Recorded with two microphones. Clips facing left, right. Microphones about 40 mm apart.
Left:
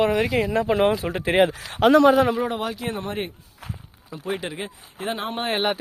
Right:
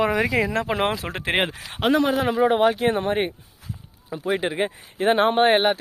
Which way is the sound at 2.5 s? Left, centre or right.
Right.